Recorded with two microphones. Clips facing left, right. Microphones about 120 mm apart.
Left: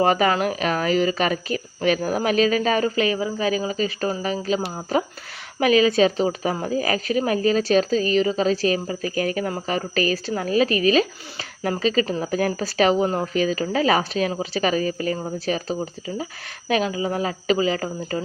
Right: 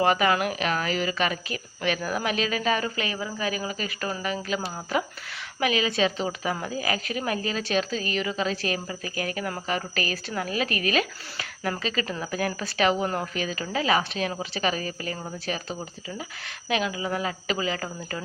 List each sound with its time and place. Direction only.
0.0 s speech: 35° left (ahead or behind)